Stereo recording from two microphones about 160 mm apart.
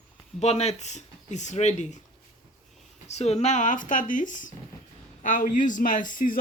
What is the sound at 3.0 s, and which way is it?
A man's voice, 40° left (ahead or behind).